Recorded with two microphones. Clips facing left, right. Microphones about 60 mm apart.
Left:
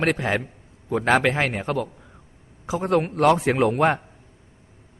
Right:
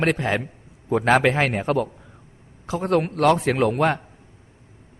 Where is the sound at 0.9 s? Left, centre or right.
Centre.